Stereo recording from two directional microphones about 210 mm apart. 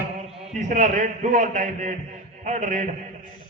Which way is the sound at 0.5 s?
35° right (ahead or behind).